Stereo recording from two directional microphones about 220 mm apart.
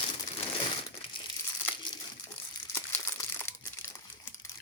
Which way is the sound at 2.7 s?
10° left (ahead or behind).